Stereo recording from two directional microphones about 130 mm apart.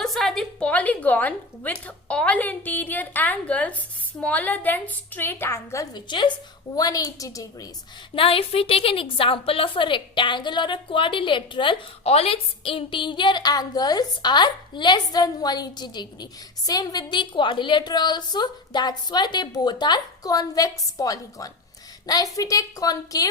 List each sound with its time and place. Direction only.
0.0 s a woman's voice: centre (ahead or behind); by 7.7 s 25° left (ahead or behind)
8.1 s a woman's voice: 45° left (ahead or behind); by 23.3 s 30° left (ahead or behind)